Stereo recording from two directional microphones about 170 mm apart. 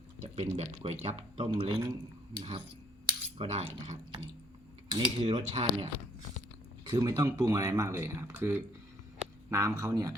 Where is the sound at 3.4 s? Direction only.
35° right (ahead or behind).